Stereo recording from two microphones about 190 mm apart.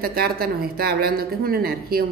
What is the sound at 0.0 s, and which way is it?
Speech, 55° right (ahead or behind).